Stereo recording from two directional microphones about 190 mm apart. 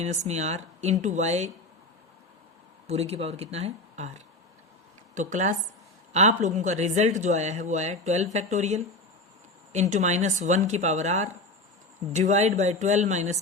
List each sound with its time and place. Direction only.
0.0 s speech: 35° right (ahead or behind)
2.8 s speech: 35° right (ahead or behind)